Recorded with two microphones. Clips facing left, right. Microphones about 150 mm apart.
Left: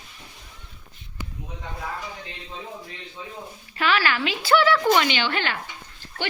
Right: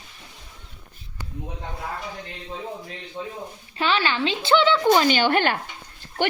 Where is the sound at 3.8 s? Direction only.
30° right (ahead or behind).